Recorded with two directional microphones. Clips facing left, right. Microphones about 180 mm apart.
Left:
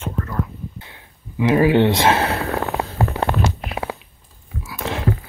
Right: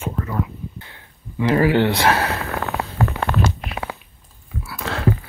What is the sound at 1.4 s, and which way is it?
Speech, 20° left (ahead or behind).